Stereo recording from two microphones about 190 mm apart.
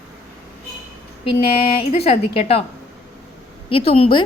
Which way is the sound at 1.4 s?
30° left (ahead or behind).